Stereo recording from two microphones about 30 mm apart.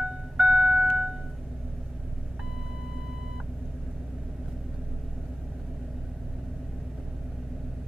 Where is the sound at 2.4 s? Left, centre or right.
Centre.